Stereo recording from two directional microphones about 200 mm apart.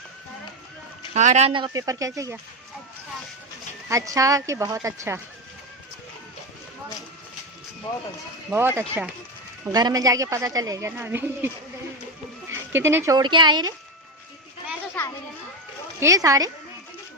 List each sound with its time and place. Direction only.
1.1 s speech: 35° right (ahead or behind); by 2.4 s 15° right (ahead or behind)
3.8 s speech: 15° right (ahead or behind)
8.4 s speech: 10° right (ahead or behind)
12.7 s speech: 10° right (ahead or behind)
15.0 s a child's voice: 10° left (ahead or behind)
16.0 s speech: 15° right (ahead or behind)